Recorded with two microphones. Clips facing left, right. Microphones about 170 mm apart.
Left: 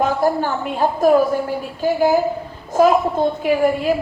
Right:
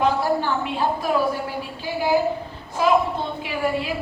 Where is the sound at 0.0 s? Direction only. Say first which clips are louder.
Left 3 dB; 45° left (ahead or behind).